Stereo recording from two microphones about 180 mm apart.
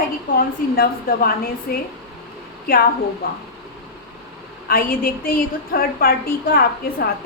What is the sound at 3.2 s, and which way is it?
Speech, 55° left (ahead or behind).